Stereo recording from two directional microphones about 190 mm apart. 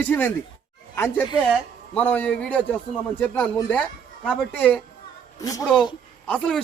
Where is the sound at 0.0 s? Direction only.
10° left (ahead or behind).